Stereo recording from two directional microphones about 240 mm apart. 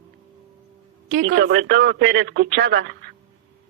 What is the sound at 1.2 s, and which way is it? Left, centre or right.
Speech, right.